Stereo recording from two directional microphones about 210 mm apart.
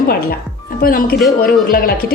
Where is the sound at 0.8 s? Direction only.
45° left (ahead or behind).